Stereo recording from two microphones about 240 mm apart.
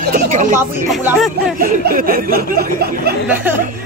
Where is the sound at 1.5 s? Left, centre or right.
Right.